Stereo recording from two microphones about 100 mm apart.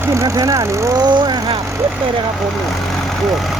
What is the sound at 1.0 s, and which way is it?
Vehicle, 45° right (ahead or behind).